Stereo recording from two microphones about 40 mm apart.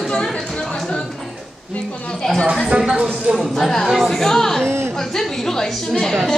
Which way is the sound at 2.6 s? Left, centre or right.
Right.